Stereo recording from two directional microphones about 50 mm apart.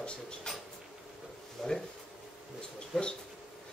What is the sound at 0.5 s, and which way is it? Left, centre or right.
Mouse, centre.